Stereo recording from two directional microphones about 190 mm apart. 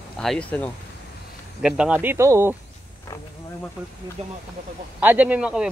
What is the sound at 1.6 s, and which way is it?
Speech, 5° right (ahead or behind).